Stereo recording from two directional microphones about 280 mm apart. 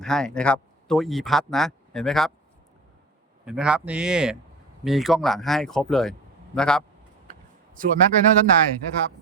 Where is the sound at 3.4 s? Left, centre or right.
Centre.